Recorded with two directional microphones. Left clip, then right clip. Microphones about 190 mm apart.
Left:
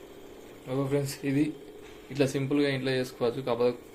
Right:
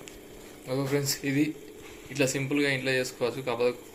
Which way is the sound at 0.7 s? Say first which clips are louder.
Right 1 dB; 5° left (ahead or behind).